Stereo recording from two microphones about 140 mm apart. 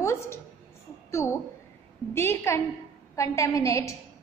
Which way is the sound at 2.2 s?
20° left (ahead or behind).